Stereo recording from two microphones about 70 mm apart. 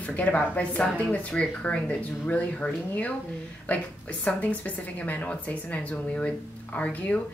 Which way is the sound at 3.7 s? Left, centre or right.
Centre.